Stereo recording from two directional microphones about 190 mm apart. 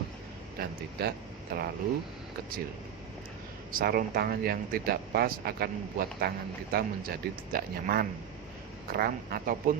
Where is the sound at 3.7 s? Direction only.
50° right (ahead or behind).